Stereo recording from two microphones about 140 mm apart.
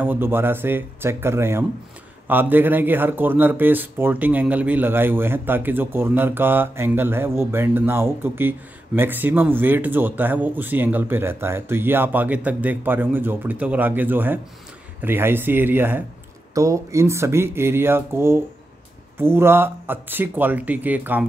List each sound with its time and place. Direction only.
0.0 s speech: 15° right (ahead or behind)